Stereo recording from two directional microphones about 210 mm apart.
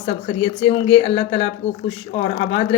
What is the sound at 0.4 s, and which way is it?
Speech, 25° left (ahead or behind).